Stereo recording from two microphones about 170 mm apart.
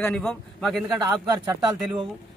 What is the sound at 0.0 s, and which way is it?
Speech, 5° left (ahead or behind).